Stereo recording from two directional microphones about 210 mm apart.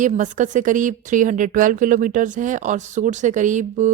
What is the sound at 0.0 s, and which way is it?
A woman's voice, 35° right (ahead or behind).